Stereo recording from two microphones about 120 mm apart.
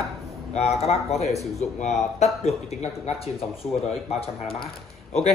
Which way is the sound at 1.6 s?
75° left (ahead or behind).